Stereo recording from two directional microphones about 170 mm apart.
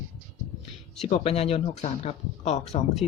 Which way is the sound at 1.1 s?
35° left (ahead or behind).